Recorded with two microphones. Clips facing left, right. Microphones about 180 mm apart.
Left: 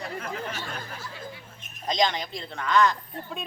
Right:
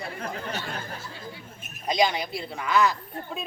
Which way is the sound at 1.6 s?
10° right (ahead or behind).